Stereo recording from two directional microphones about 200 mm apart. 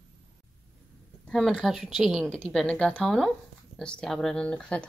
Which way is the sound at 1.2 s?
5° left (ahead or behind).